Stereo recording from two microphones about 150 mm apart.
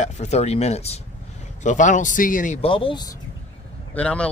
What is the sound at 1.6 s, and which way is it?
Speech, 55° left (ahead or behind).